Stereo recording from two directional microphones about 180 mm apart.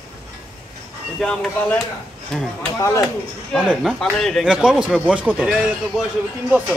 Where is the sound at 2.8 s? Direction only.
15° left (ahead or behind).